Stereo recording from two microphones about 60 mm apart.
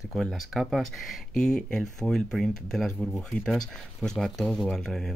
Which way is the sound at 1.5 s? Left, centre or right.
Centre.